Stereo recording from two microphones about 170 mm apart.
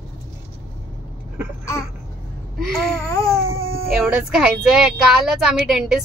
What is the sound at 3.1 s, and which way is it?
Babbling, 20° left (ahead or behind).